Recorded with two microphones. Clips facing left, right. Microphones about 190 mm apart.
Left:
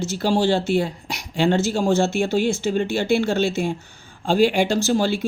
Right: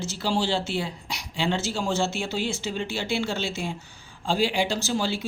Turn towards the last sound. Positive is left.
turn(degrees=55)  # may be behind; listen again after turning